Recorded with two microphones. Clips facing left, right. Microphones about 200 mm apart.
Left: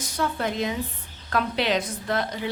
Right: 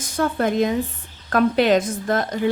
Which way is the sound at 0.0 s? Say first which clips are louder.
Right 6 dB; 50° right (ahead or behind).